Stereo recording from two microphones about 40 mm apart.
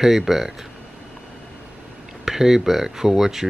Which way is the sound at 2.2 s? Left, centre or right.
Centre.